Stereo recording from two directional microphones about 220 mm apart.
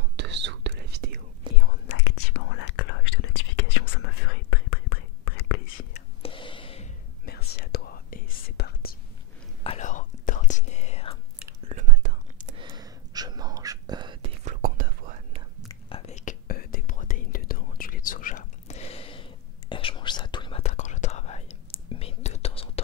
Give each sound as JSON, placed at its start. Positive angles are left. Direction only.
{"t": 0.1, "sound": "whispering", "side_deg": -50}
{"t": 1.5, "sound": "whispering", "side_deg": -20}
{"t": 2.0, "sound": "whispering", "side_deg": 65}
{"t": 5.8, "sound": "whispering", "side_deg": 30}
{"t": 7.6, "sound": "whispering", "side_deg": 45}
{"t": 9.6, "sound": "whispering", "side_deg": 30}
{"t": 11.7, "sound": "whispering", "side_deg": -35}
{"t": 12.5, "sound": "whispering", "side_deg": -20}
{"t": 14.4, "sound": "whispering", "side_deg": -35}
{"t": 15.7, "sound": "whispering", "side_deg": 30}